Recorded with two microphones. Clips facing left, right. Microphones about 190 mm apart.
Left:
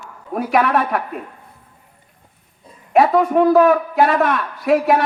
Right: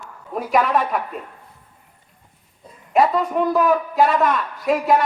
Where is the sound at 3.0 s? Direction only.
65° left (ahead or behind).